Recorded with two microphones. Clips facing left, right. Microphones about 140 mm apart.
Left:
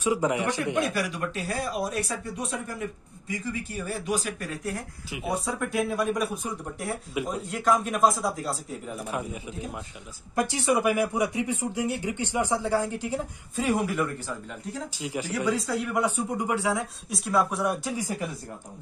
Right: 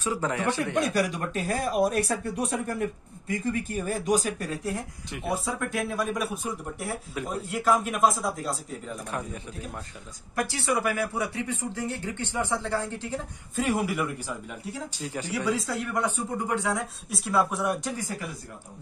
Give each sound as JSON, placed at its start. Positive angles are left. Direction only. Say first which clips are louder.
{"t": 0.0, "sound": "speech", "louder": "left 3 dB", "side_deg": 15}
{"t": 0.9, "sound": "speech", "louder": "right 3 dB", "side_deg": -40}
{"t": 5.1, "sound": "speech", "louder": "even", "side_deg": 0}
{"t": 10.3, "sound": "speech", "louder": "left 3 dB", "side_deg": 20}
{"t": 13.6, "sound": "speech", "louder": "left 1 dB", "side_deg": 0}
{"t": 15.0, "sound": "speech", "louder": "left 2 dB", "side_deg": 10}
{"t": 17.9, "sound": "speech", "louder": "left 3 dB", "side_deg": 15}